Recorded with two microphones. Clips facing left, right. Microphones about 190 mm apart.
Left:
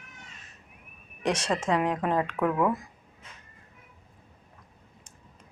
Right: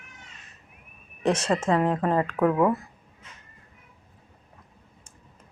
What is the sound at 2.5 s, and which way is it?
Speech, 25° right (ahead or behind).